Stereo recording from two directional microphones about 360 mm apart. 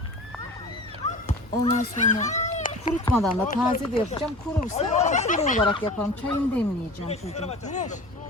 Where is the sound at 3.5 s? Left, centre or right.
Centre.